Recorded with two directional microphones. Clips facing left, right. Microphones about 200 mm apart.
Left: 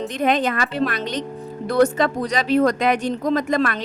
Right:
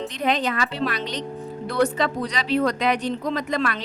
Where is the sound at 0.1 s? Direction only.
50° left (ahead or behind).